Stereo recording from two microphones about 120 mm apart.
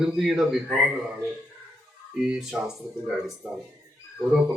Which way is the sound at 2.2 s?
5° right (ahead or behind).